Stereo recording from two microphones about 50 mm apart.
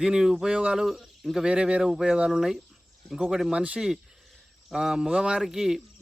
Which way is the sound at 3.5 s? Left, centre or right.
Right.